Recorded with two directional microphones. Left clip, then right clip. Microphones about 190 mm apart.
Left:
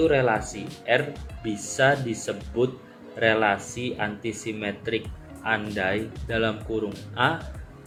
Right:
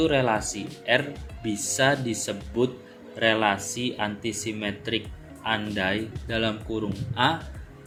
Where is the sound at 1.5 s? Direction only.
35° right (ahead or behind).